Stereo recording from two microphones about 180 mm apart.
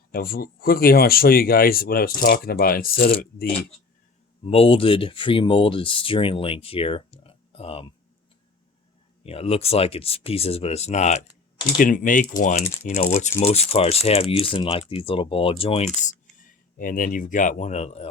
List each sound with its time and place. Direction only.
0.1 s speech: 55° left (ahead or behind)
4.4 s speech: 30° left (ahead or behind)
9.2 s speech: 35° left (ahead or behind)
16.7 s speech: 50° left (ahead or behind)